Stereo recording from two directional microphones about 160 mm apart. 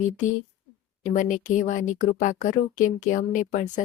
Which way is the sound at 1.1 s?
55° left (ahead or behind).